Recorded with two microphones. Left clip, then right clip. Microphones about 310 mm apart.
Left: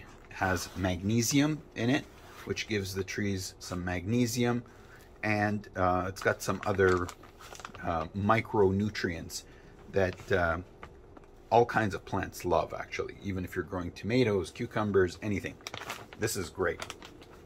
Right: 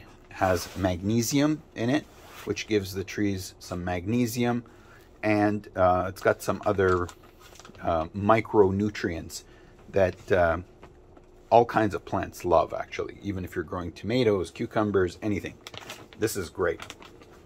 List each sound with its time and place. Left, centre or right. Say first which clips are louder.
0.3 s speech: right 6 dB; centre